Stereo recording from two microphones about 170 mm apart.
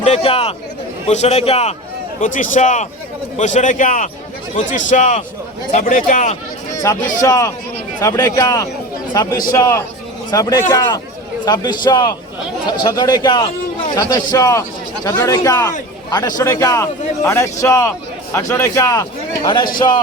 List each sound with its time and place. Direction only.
0.0 s a man's voice: 35° left (ahead or behind)
2.2 s speech: 50° left (ahead or behind)
6.9 s a man's voice: 20° left (ahead or behind)